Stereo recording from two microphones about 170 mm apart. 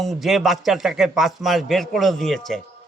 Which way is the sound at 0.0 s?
Centre (ahead or behind).